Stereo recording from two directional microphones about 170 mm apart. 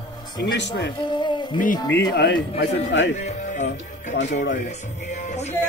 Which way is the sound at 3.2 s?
45° left (ahead or behind).